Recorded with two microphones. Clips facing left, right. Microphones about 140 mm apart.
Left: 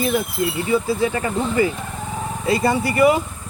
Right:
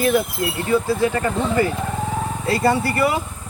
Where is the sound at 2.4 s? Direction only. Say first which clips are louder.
Even; 20° left (ahead or behind).